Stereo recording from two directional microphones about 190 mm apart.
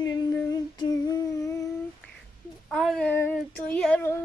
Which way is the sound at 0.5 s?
20° left (ahead or behind).